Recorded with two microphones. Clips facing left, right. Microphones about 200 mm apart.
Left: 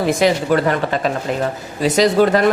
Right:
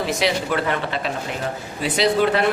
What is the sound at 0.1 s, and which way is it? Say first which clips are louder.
A woman's voice: left 9 dB; 45° left (ahead or behind).